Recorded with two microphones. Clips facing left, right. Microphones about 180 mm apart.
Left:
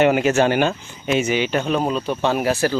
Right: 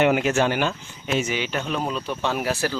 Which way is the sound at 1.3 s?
65° left (ahead or behind).